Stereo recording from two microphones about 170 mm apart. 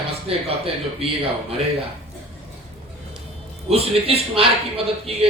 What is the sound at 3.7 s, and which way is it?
Speech, 35° right (ahead or behind).